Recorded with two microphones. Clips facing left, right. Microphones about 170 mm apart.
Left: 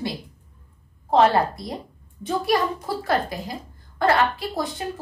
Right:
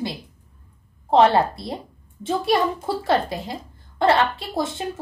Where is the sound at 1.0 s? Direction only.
25° right (ahead or behind).